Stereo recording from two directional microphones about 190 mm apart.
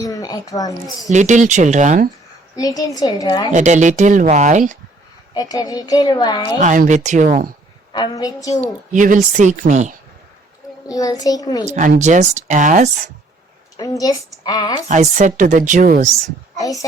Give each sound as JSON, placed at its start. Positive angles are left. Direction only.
{"t": 0.0, "sound": "speech", "side_deg": 20}
{"t": 1.1, "sound": "speech", "side_deg": -40}
{"t": 2.6, "sound": "speech", "side_deg": 20}
{"t": 3.5, "sound": "speech", "side_deg": -40}
{"t": 5.3, "sound": "speech", "side_deg": 20}
{"t": 6.6, "sound": "speech", "side_deg": -40}
{"t": 7.9, "sound": "speech", "side_deg": 20}
{"t": 8.9, "sound": "speech", "side_deg": -40}
{"t": 10.8, "sound": "speech", "side_deg": 20}
{"t": 11.7, "sound": "speech", "side_deg": -40}
{"t": 13.7, "sound": "speech", "side_deg": 15}
{"t": 14.8, "sound": "speech", "side_deg": -40}
{"t": 16.6, "sound": "a child's voice", "side_deg": 15}